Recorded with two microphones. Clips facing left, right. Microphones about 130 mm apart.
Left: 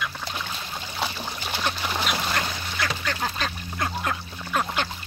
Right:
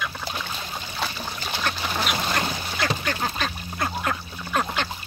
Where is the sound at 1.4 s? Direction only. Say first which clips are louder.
Even; 10° left (ahead or behind).